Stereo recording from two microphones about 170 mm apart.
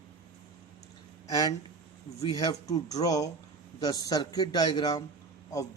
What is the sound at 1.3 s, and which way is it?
A man's voice, 20° left (ahead or behind).